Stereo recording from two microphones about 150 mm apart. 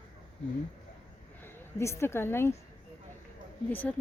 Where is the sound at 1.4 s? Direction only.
20° left (ahead or behind).